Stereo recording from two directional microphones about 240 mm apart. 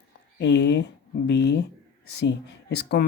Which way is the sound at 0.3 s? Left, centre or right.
Left.